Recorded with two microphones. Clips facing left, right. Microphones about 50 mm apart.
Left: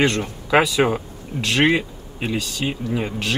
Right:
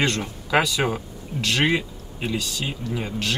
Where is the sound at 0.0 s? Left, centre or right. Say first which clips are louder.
Left 4 dB; centre.